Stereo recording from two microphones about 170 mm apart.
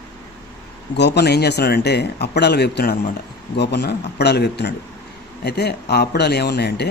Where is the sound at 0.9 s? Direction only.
85° left.